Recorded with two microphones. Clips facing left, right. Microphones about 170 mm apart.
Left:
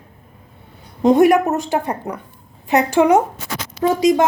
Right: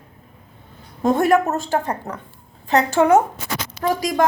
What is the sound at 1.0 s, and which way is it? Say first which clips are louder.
A woman's voice: left 4 dB; 15° left (ahead or behind).